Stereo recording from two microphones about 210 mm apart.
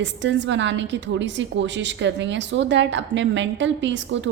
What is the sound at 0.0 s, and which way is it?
A woman's voice, 55° right (ahead or behind).